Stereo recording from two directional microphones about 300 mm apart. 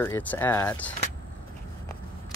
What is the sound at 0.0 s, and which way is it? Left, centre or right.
Speech, centre.